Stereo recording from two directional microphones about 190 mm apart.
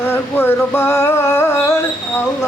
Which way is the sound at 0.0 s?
10° left (ahead or behind).